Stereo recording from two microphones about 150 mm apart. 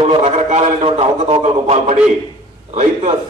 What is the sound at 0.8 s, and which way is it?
A man's voice, 35° right (ahead or behind).